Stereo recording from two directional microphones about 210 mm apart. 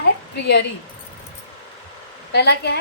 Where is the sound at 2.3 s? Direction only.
50° left (ahead or behind).